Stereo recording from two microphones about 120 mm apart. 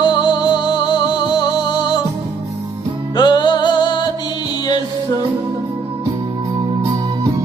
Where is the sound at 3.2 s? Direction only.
40° left (ahead or behind).